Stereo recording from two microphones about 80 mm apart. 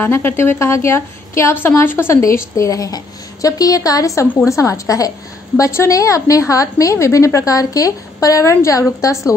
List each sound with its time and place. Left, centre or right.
0.0 s a woman's voice: left